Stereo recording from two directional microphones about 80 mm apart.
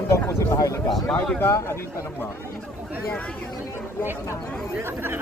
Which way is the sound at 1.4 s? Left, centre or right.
Left.